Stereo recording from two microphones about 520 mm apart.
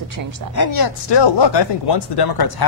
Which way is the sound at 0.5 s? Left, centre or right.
Left.